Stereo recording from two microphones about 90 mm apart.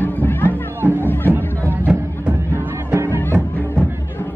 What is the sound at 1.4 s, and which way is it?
Music, 20° right (ahead or behind).